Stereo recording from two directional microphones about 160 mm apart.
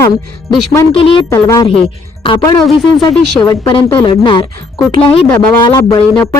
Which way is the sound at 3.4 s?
20° left (ahead or behind).